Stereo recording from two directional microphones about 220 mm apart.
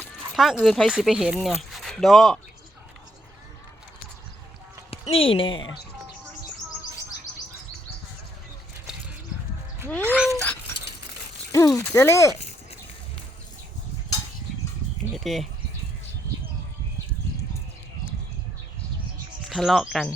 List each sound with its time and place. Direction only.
0.0 s speech: 5° left (ahead or behind)
4.9 s speech: 25° left (ahead or behind)
10.0 s speech: 10° right (ahead or behind)
10.3 s speech: 5° left (ahead or behind)
15.1 s speech: centre (ahead or behind)
19.5 s speech: centre (ahead or behind)